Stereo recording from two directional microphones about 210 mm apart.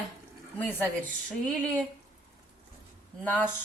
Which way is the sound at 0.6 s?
10° left (ahead or behind).